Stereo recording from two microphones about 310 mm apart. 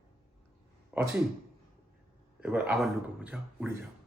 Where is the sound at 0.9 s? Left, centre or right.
Centre.